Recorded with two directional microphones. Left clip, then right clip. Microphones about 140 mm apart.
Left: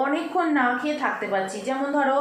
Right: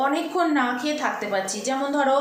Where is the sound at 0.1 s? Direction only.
20° right (ahead or behind).